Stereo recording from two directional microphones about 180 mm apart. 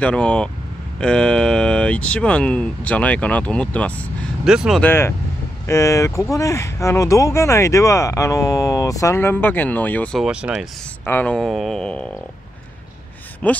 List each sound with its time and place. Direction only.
0.0 s speech: 5° left (ahead or behind)
4.5 s speech: 5° right (ahead or behind)
4.8 s speech: 15° left (ahead or behind)
10.2 s speech: 5° right (ahead or behind)
11.1 s speech: 10° left (ahead or behind)
13.4 s speech: 5° left (ahead or behind)